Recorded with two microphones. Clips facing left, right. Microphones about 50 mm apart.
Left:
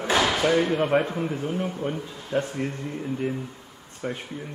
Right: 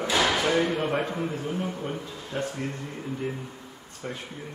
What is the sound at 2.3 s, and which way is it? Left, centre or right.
Speech, left.